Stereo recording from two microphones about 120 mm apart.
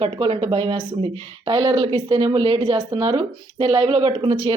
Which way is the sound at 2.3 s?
50° right (ahead or behind).